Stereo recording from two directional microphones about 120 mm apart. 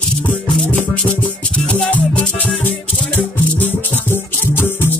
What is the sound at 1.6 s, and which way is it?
Music, 10° left (ahead or behind).